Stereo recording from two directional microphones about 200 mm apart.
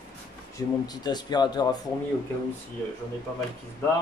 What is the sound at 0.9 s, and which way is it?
Speech, 20° left (ahead or behind).